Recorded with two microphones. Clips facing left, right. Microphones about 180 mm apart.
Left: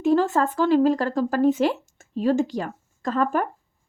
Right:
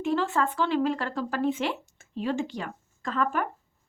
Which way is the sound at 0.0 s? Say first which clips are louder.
Left 6 dB; 40° left (ahead or behind).